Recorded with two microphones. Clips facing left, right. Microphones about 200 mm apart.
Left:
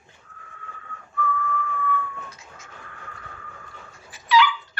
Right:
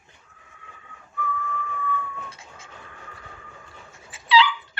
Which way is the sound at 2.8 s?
15° right (ahead or behind).